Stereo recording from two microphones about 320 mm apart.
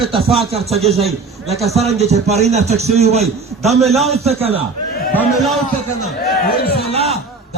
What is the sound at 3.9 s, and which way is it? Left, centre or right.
Speech, centre.